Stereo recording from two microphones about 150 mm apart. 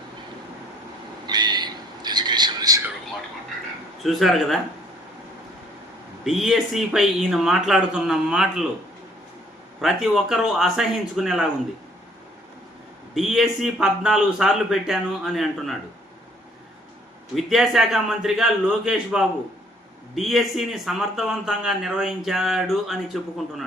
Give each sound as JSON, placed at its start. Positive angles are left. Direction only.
{"t": 1.3, "sound": "a sound", "side_deg": -30}
{"t": 4.0, "sound": "a man's voice", "side_deg": 0}
{"t": 6.2, "sound": "a man's voice", "side_deg": 0}
{"t": 9.8, "sound": "a man's voice", "side_deg": 0}
{"t": 13.1, "sound": "a man's voice", "side_deg": 0}
{"t": 17.3, "sound": "a man's voice", "side_deg": 0}